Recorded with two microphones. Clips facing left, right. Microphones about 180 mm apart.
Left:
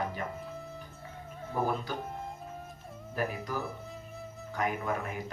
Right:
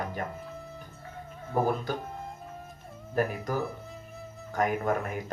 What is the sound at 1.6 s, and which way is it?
Speech, 45° right (ahead or behind).